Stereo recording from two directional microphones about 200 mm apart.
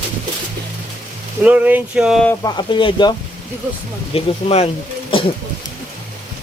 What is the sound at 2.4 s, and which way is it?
Speech, 25° left (ahead or behind).